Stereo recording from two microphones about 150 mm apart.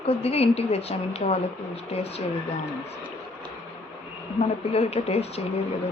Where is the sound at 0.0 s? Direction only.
40° left (ahead or behind).